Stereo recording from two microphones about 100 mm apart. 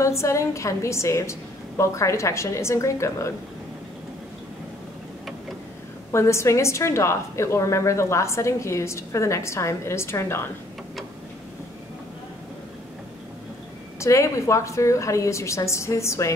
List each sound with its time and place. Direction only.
0.0 s a woman's voice: 30° left (ahead or behind)
6.1 s a woman's voice: 30° left (ahead or behind)
13.9 s a woman's voice: 30° left (ahead or behind)